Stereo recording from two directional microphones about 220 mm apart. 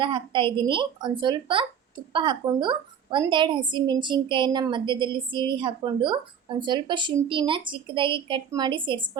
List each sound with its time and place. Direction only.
0.0 s a woman's voice: 20° right (ahead or behind)